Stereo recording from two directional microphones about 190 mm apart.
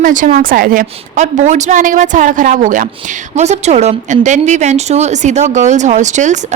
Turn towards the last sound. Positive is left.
turn(degrees=-40)  # may be behind; listen again after turning